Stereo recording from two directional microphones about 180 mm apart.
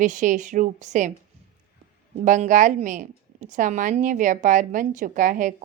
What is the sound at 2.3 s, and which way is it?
A woman's voice, 45° right (ahead or behind).